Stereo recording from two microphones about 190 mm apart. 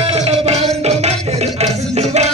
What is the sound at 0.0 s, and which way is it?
Music, 35° right (ahead or behind).